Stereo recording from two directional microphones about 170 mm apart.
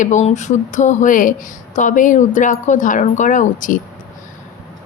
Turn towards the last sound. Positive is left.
turn(degrees=50)  # may be behind; listen again after turning